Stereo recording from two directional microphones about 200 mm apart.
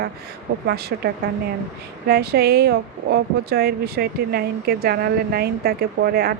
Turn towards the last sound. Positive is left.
turn(degrees=-50)  # may be behind; listen again after turning